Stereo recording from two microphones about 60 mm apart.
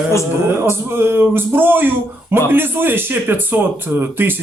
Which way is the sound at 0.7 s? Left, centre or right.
Right.